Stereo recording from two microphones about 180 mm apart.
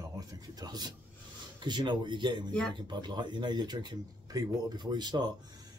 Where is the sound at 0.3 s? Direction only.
20° right (ahead or behind).